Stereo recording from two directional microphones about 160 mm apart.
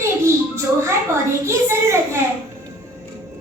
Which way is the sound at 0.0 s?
15° right (ahead or behind).